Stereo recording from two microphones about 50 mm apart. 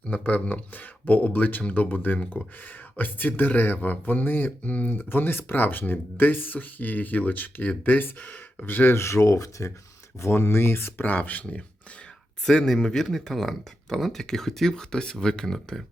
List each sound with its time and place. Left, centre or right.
0.0 s speech: left
4.7 s speech: left
4.9 s speech: left
9.0 s speech: left
10.2 s speech: left
12.5 s speech: centre